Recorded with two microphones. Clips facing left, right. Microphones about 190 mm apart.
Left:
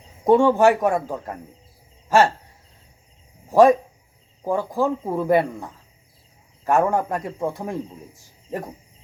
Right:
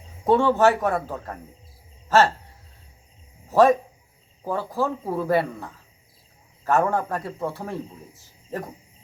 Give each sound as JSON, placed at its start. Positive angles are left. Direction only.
{"t": 0.3, "sound": "speech", "side_deg": 15}
{"t": 3.5, "sound": "speech", "side_deg": 10}